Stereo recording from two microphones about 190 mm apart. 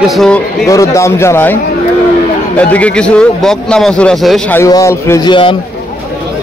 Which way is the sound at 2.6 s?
5° left (ahead or behind).